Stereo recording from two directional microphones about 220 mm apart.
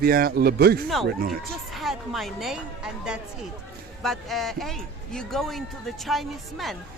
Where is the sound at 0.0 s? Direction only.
45° right (ahead or behind).